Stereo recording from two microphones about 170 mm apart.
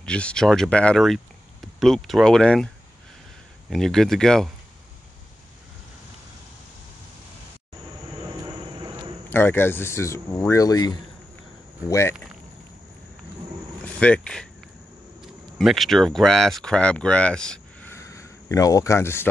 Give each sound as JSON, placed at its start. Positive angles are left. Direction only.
{"t": 0.0, "sound": "speech", "side_deg": 5}
{"t": 3.7, "sound": "speech", "side_deg": 0}
{"t": 8.7, "sound": "a sound", "side_deg": -25}
{"t": 9.3, "sound": "speech", "side_deg": 10}
{"t": 13.9, "sound": "speech", "side_deg": 5}
{"t": 15.5, "sound": "speech", "side_deg": 0}
{"t": 17.9, "sound": "a sound", "side_deg": 20}